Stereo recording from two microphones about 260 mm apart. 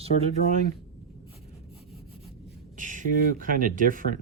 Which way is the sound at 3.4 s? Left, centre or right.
Right.